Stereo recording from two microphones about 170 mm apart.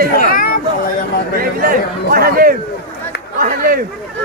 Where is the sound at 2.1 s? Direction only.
60° right (ahead or behind).